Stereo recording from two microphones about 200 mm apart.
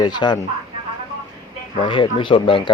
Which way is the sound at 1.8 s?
25° left (ahead or behind).